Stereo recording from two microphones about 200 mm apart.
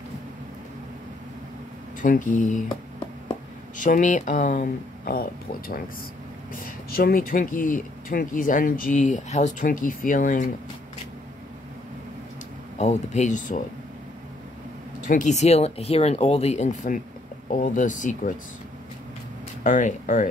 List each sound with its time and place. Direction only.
2.0 s speech: 40° left (ahead or behind)
3.8 s speech: 40° left (ahead or behind)
12.7 s speech: 35° left (ahead or behind)
15.0 s speech: 40° left (ahead or behind)
19.6 s speech: 40° left (ahead or behind)